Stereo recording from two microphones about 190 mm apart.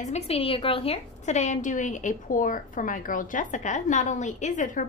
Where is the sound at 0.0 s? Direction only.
35° left (ahead or behind).